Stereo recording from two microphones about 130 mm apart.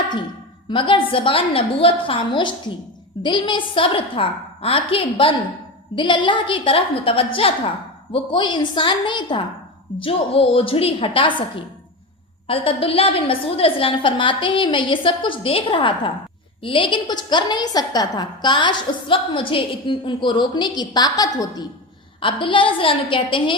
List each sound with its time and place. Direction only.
0.7 s a woman's voice: 40° left (ahead or behind)
22.2 s a woman's voice: 40° left (ahead or behind)